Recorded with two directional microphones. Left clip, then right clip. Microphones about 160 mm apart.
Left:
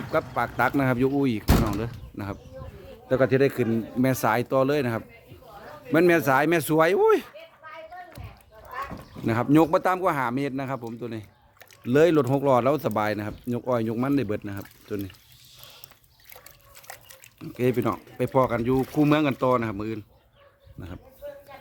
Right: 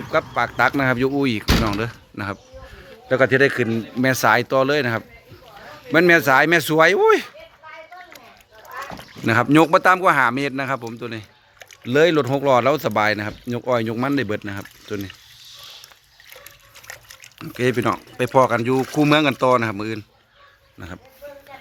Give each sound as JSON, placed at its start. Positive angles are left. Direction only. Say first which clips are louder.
{"t": 0.1, "sound": "speech", "louder": "right 5 dB", "side_deg": 5}
{"t": 9.2, "sound": "a man's voice", "louder": "right 6 dB", "side_deg": -10}
{"t": 16.8, "sound": "dog", "louder": "right 6 dB", "side_deg": 35}
{"t": 17.3, "sound": "a man's voice", "louder": "right 4 dB", "side_deg": -10}